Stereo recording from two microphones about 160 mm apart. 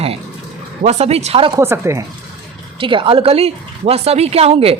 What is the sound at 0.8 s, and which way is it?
Speech, 45° right (ahead or behind).